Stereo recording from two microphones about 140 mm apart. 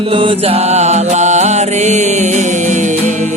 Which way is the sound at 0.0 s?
40° right (ahead or behind).